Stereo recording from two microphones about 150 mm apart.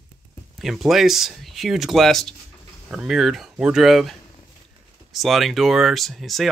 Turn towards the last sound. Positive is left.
turn(degrees=0)  # may be behind; listen again after turning